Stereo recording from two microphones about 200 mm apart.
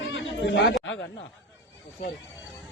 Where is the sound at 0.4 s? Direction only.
60° left (ahead or behind).